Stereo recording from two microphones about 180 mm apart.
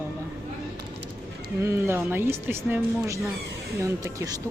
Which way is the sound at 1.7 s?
10° right (ahead or behind).